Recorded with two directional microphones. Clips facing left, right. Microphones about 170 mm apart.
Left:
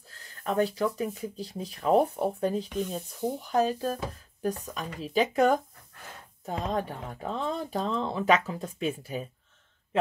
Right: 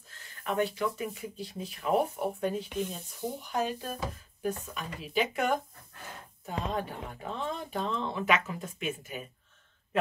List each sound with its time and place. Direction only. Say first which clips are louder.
0.4 s speech: left 3 dB; 35° left (ahead or behind)